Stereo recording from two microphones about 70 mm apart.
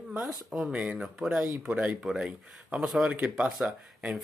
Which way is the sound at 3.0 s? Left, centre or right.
Centre.